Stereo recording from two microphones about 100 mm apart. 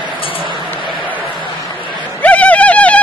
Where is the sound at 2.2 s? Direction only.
15° left (ahead or behind).